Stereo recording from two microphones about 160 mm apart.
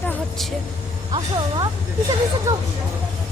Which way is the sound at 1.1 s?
25° right (ahead or behind).